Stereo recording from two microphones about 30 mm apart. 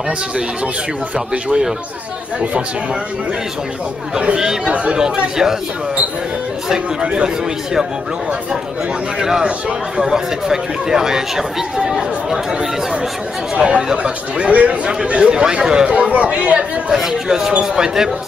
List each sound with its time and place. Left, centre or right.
1.1 s speech: right
4.9 s speech: right
10.0 s speech: centre
13.6 s speech: right
14.5 s speech: right
15.0 s speech: right
15.4 s speech: right
16.1 s speech: right
16.9 s speech: centre